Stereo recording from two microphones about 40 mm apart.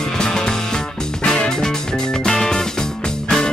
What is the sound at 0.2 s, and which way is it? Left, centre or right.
Music, centre.